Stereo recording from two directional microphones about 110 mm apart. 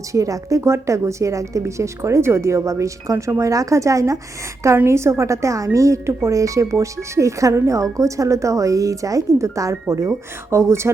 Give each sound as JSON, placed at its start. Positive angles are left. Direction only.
{"t": 0.1, "sound": "a woman's voice", "side_deg": -30}